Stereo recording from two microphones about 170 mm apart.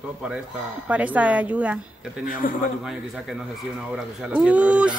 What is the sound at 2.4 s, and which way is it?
Speech, 55° left (ahead or behind).